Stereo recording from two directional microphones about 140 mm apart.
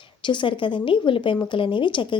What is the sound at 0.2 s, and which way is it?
Speech, 35° left (ahead or behind).